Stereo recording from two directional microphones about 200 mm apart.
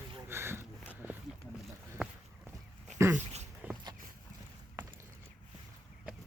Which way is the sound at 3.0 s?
10° right (ahead or behind).